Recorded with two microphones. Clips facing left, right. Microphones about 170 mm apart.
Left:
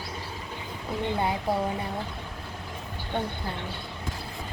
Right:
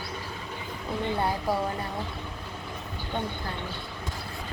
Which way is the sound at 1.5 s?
25° left (ahead or behind).